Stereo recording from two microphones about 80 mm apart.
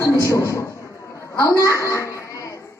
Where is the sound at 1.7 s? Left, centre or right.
Left.